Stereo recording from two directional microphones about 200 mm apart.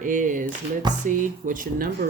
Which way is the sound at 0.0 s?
40° right (ahead or behind).